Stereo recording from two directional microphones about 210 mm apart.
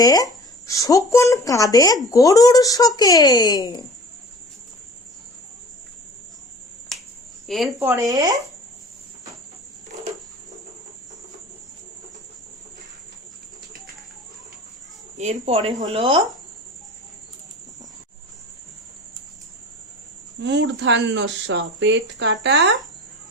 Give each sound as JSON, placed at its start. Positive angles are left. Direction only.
{"t": 0.0, "sound": "speech", "side_deg": 15}
{"t": 7.4, "sound": "a woman's voice", "side_deg": 0}
{"t": 7.8, "sound": "speech", "side_deg": -15}
{"t": 15.2, "sound": "speech", "side_deg": -30}
{"t": 20.4, "sound": "speech", "side_deg": -60}